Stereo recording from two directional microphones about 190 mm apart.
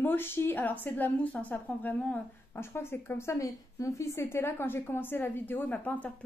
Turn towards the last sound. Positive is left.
turn(degrees=10)  # may be behind; listen again after turning